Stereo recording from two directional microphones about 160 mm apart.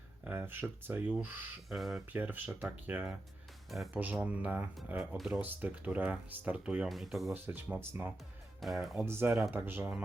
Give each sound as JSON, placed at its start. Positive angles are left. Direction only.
{"t": 0.3, "sound": "speech", "side_deg": -10}
{"t": 7.3, "sound": "speech", "side_deg": -10}
{"t": 8.6, "sound": "speech", "side_deg": 0}
{"t": 9.0, "sound": "speech", "side_deg": -15}